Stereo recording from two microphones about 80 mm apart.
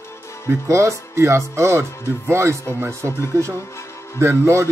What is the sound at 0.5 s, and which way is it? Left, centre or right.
Speech, right.